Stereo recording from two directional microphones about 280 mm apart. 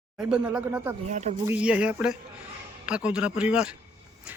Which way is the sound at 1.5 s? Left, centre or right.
Centre.